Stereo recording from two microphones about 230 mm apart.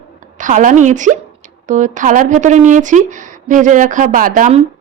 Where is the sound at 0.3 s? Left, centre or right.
Right.